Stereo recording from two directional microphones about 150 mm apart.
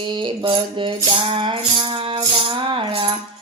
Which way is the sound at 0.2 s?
35° right (ahead or behind).